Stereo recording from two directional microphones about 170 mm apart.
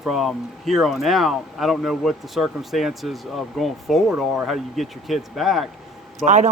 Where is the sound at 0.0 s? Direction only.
Centre (ahead or behind).